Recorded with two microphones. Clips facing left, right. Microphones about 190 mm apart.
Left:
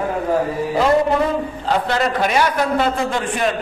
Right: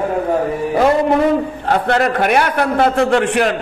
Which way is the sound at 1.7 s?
60° right (ahead or behind).